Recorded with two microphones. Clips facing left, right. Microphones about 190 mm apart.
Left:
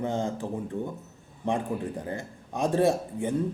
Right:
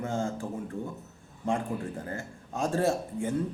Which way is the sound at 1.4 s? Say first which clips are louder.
Left 2 dB; 20° left (ahead or behind).